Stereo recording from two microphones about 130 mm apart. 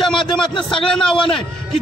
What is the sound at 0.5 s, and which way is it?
Speech, 40° left (ahead or behind).